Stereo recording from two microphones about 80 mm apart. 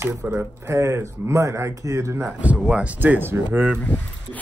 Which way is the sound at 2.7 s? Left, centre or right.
Centre.